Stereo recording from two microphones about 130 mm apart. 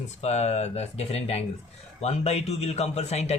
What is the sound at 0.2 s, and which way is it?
A man's voice, 60° left (ahead or behind).